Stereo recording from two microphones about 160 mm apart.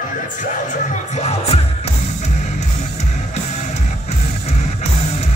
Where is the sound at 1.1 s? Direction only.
40° left (ahead or behind).